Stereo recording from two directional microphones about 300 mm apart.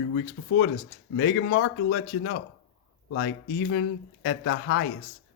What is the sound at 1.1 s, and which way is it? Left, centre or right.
A man's voice, left.